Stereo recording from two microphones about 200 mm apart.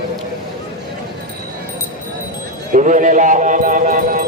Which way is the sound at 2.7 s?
40° right (ahead or behind).